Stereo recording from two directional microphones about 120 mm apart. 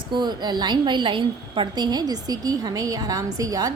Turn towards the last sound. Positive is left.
turn(degrees=-30)  # may be behind; listen again after turning